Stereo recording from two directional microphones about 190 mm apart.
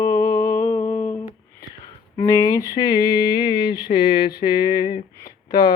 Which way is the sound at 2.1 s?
15° left (ahead or behind).